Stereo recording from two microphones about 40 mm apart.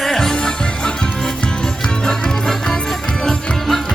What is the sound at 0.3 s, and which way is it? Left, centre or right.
Music, left.